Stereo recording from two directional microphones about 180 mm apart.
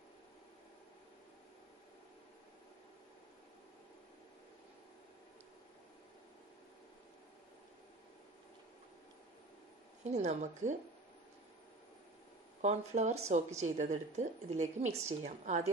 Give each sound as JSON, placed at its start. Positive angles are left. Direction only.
{"t": 10.0, "sound": "speech", "side_deg": -40}
{"t": 12.6, "sound": "speech", "side_deg": -40}